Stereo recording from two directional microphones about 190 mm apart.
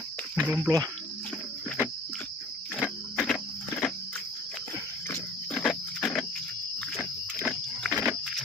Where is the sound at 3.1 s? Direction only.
5° left (ahead or behind).